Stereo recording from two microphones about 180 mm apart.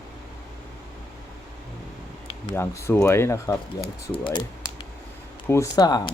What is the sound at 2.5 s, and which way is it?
Speech, 15° left (ahead or behind).